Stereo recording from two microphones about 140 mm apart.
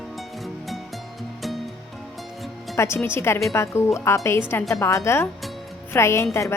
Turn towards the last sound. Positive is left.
turn(degrees=20)  # may be behind; listen again after turning